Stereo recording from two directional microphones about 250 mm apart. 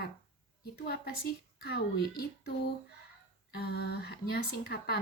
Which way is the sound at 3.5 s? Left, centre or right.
Left.